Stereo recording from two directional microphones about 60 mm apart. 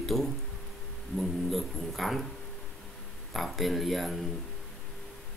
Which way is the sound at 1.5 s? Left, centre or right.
Centre.